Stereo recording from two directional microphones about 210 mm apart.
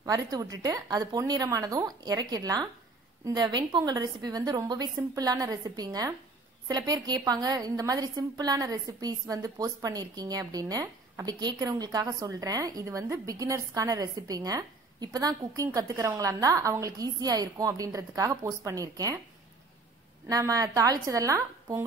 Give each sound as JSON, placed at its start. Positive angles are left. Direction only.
{"t": 0.0, "sound": "a woman's voice", "side_deg": -15}
{"t": 20.2, "sound": "a woman's voice", "side_deg": -15}